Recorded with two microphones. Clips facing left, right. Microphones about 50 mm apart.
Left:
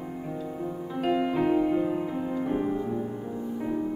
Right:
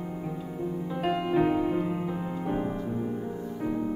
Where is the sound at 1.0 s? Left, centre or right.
Centre.